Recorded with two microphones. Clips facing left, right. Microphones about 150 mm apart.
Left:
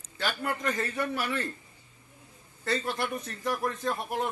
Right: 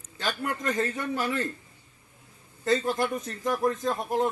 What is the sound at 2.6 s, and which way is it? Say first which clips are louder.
Speech: right 6 dB; 25° right (ahead or behind).